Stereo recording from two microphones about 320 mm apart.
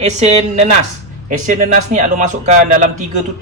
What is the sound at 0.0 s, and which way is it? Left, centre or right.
A man's voice, right.